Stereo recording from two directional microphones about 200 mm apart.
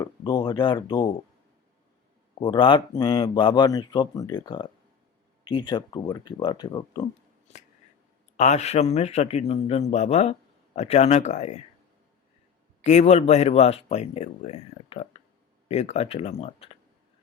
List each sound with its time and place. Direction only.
0.0 s speech: 20° left (ahead or behind)
2.4 s speech: 25° left (ahead or behind)
8.4 s speech: 35° left (ahead or behind)
12.8 s speech: 35° left (ahead or behind)